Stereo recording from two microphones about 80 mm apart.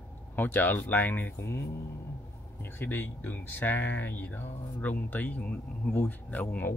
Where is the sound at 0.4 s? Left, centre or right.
Left.